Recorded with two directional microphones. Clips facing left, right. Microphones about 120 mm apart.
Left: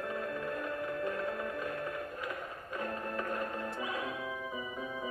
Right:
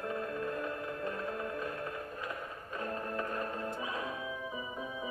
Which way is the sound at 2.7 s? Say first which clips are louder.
Even; 20° right (ahead or behind).